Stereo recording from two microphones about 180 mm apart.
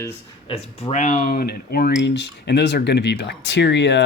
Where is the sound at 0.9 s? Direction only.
45° left (ahead or behind).